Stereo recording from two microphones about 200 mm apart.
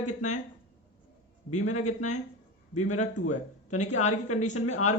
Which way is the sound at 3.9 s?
35° left (ahead or behind).